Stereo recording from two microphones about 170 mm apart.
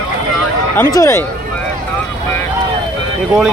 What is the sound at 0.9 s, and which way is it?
Speech, 15° left (ahead or behind).